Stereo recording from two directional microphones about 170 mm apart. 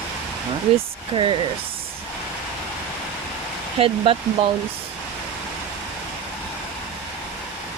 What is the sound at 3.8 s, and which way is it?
Speech, 30° right (ahead or behind).